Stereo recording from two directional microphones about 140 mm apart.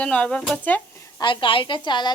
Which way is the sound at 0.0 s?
5° left (ahead or behind).